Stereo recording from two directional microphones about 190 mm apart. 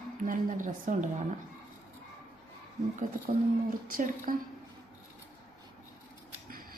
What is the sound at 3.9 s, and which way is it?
Speech, 45° right (ahead or behind).